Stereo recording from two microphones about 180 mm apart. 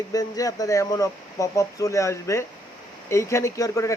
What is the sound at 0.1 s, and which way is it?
Speech, 20° left (ahead or behind).